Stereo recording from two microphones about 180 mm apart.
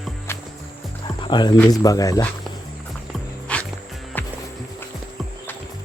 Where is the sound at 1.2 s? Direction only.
25° left (ahead or behind).